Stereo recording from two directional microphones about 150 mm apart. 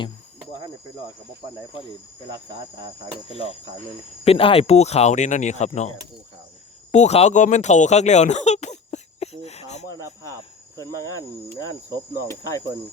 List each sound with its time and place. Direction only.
3.3 s speech: 45° left (ahead or behind)
6.9 s speech: 50° left (ahead or behind)
10.8 s cricket: 20° left (ahead or behind)